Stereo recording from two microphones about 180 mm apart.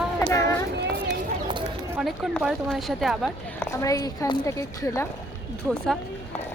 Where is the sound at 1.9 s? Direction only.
Centre (ahead or behind).